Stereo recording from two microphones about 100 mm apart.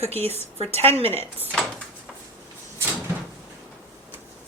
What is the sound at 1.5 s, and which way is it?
Speech, 10° left (ahead or behind).